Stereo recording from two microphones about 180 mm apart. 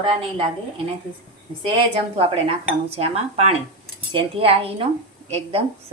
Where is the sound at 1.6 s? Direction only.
25° right (ahead or behind).